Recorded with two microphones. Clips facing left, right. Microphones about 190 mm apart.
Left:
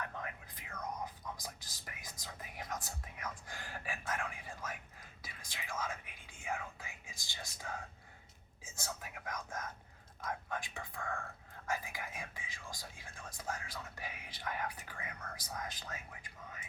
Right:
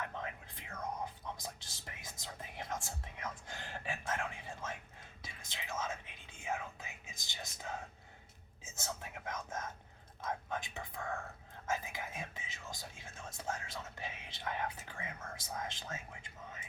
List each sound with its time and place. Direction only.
0.0 s whispering: 25° right (ahead or behind)